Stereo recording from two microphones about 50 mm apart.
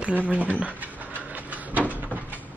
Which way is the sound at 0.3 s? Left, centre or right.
Right.